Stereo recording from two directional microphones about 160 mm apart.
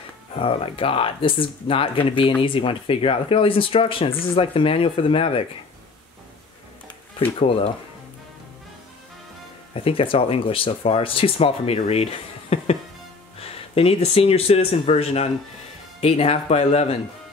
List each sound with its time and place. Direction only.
0.3 s speech: 35° left (ahead or behind)
7.3 s speech: 35° left (ahead or behind)
9.8 s speech: 35° left (ahead or behind)